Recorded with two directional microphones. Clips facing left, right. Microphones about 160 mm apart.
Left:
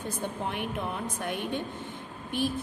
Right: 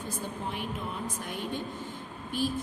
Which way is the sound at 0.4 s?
65° left (ahead or behind).